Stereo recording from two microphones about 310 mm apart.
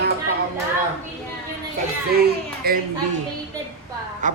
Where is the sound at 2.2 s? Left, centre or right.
Right.